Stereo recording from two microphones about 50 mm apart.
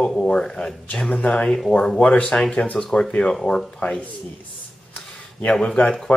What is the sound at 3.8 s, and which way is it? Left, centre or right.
Speech, left.